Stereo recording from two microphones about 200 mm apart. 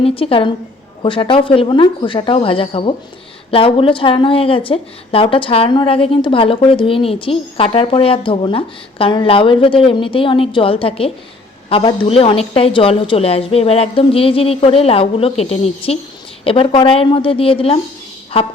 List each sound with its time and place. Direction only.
0.0 s speech: 25° left (ahead or behind)